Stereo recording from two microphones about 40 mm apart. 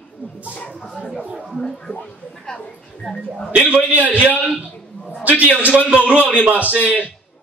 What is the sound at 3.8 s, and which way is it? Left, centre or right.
Speech, right.